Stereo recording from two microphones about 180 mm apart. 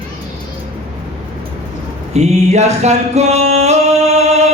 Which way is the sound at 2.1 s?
40° right (ahead or behind).